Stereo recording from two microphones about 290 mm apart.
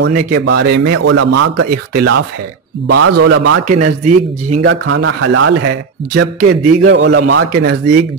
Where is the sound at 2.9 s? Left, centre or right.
Right.